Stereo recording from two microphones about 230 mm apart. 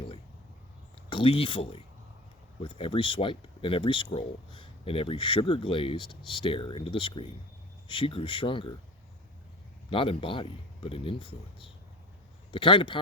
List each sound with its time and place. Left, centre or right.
1.1 s speech: left
9.9 s speech: left